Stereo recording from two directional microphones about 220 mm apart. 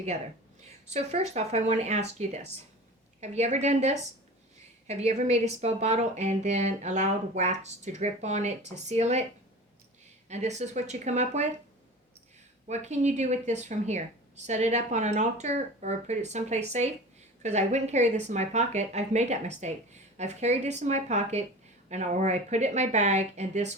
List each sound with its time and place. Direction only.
0.9 s a woman's voice: 30° right (ahead or behind)
10.2 s a woman's voice: 30° right (ahead or behind)
12.6 s a woman's voice: 30° right (ahead or behind)